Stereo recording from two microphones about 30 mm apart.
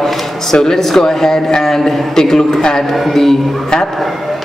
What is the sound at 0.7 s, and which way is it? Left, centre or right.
A man's voice, centre.